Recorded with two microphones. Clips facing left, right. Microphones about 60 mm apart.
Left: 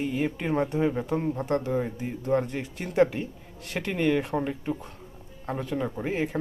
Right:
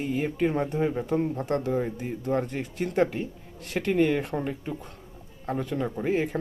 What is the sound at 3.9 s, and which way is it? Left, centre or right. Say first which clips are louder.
Speech: right 2 dB; centre.